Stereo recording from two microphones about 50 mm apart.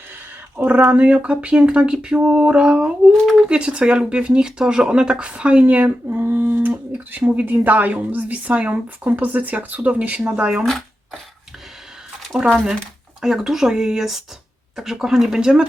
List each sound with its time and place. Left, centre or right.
0.5 s a woman's voice: right
6.1 s a woman's voice: right
10.6 s shuffling cards: centre
12.3 s speech: centre